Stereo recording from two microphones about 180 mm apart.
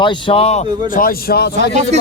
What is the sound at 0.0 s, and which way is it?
Speech, 25° left (ahead or behind).